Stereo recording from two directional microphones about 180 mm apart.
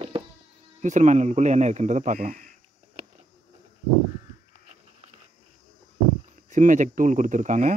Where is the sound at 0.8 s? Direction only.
40° right (ahead or behind).